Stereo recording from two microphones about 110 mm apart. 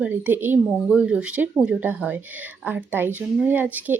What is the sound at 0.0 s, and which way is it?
A woman's voice, 15° right (ahead or behind).